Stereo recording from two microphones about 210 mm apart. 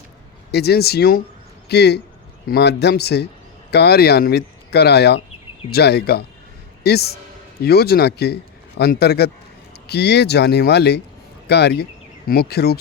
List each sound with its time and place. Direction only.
0.5 s speech: 50° left (ahead or behind)